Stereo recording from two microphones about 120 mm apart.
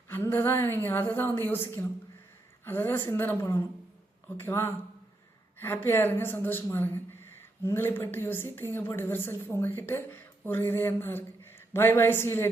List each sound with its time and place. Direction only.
0.1 s speech: 20° left (ahead or behind)
2.6 s a woman's voice: 15° left (ahead or behind)